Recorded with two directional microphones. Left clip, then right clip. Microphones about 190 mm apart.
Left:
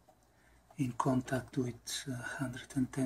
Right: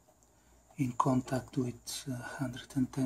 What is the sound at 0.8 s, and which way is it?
Speech, 15° right (ahead or behind).